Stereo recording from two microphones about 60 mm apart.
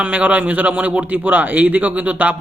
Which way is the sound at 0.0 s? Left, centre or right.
Right.